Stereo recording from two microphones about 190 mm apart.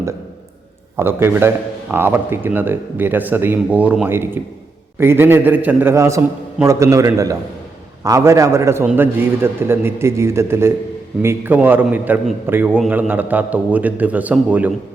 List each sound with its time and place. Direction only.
0.9 s speech: 10° right (ahead or behind)